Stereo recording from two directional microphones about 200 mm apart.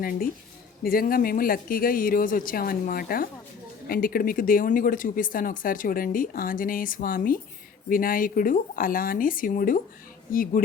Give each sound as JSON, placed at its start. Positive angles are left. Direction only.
{"t": 0.9, "sound": "speech", "side_deg": 45}